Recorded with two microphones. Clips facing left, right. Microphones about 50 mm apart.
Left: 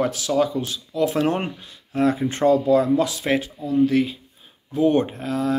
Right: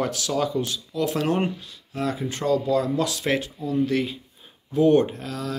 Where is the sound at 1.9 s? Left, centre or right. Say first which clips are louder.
Left 7 dB; left; by 4.1 s centre.